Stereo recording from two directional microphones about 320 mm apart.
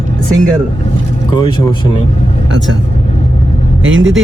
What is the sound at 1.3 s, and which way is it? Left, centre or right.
Speech, centre.